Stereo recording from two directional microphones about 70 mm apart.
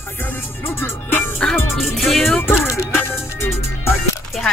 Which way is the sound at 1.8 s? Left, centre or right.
Centre.